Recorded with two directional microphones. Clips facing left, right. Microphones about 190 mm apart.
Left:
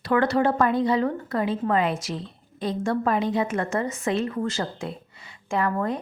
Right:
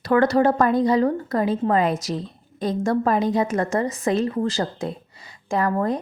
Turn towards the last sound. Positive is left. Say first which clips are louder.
# right 3 dB
turn(degrees=-40)  # may be behind; listen again after turning